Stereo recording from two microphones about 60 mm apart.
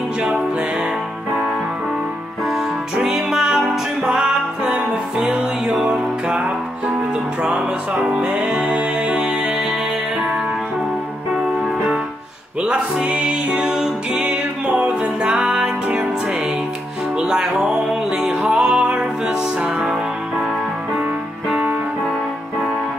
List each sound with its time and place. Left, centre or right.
2.5 s music: centre
8.1 s music: centre
12.6 s music: centre
17.2 s music: centre